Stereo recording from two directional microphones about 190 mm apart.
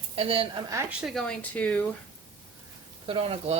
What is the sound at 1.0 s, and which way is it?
Speech, centre (ahead or behind).